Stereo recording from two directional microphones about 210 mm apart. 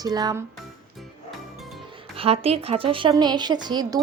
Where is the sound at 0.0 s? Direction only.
20° right (ahead or behind).